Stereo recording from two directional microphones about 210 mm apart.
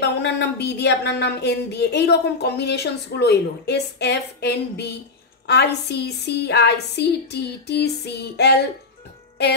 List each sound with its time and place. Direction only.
0.0 s speech: 55° left (ahead or behind)